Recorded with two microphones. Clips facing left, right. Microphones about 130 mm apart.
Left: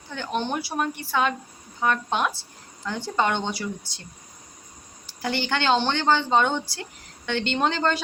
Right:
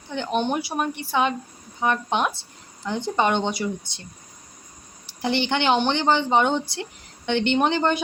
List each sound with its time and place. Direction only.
0.1 s speech: 20° right (ahead or behind)
5.2 s speech: 20° right (ahead or behind)